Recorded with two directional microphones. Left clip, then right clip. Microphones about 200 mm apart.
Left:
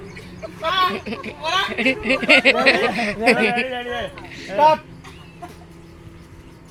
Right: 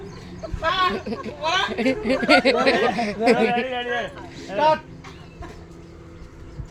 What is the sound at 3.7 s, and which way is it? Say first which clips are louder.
Speech: even; 45° left (ahead or behind).